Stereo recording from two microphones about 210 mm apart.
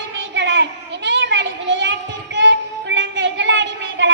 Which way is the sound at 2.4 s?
60° right (ahead or behind).